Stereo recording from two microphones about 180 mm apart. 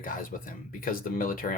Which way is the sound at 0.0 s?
50° left (ahead or behind).